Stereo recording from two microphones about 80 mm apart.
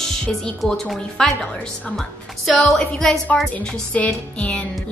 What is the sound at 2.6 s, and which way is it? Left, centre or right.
Speech, centre.